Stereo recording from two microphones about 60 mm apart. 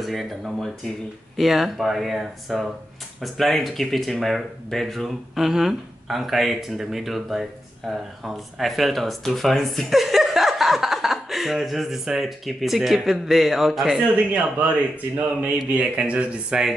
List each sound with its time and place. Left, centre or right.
0.0 s speech: centre
14.1 s a man's voice: right